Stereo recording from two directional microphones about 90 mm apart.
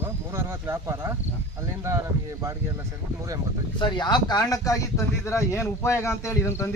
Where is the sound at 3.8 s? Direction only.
55° left (ahead or behind).